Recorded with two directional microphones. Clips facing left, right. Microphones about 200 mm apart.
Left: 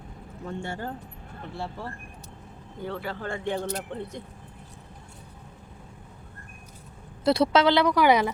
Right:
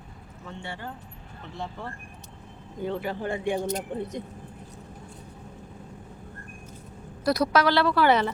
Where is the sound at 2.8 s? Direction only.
15° right (ahead or behind).